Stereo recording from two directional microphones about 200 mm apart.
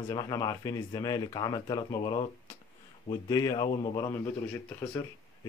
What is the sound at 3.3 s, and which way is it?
A man's voice, 20° left (ahead or behind).